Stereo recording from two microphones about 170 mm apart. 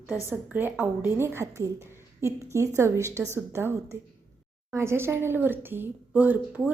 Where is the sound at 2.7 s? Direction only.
15° right (ahead or behind).